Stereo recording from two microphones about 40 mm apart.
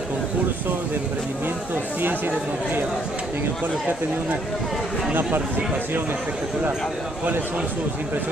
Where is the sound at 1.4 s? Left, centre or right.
Right.